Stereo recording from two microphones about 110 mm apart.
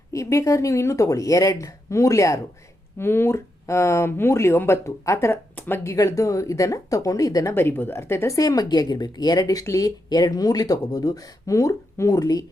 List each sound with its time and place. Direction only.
0.1 s speech: 30° left (ahead or behind)
7.5 s speech: 20° left (ahead or behind); by 12.5 s 35° left (ahead or behind)